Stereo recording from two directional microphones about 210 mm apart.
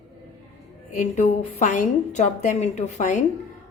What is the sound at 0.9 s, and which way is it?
Speech, 35° left (ahead or behind).